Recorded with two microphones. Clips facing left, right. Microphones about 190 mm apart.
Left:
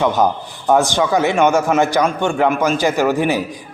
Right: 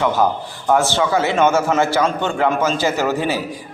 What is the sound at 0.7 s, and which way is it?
A man's voice, 15° left (ahead or behind).